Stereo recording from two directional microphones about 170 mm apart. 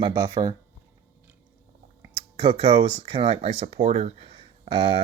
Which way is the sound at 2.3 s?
30° right (ahead or behind).